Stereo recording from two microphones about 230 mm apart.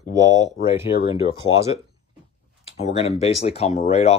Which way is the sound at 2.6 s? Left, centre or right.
Left.